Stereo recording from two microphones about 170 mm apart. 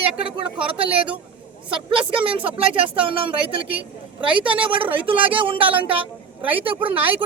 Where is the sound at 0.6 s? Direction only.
30° right (ahead or behind).